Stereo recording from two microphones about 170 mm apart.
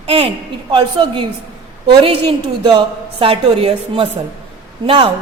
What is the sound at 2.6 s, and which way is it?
A woman's voice, 30° right (ahead or behind).